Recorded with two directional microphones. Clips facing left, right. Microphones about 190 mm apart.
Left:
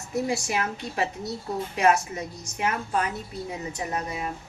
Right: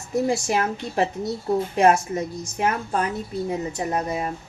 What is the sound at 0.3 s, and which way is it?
A woman's voice, 45° right (ahead or behind).